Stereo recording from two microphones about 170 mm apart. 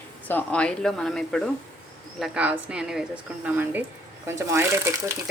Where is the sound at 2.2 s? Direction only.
10° right (ahead or behind).